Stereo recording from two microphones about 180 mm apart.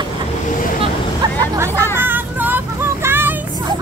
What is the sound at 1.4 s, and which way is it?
Hubbub, 15° right (ahead or behind).